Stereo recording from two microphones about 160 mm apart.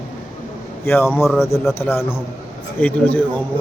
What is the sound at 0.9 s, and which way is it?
A man's voice, 15° left (ahead or behind).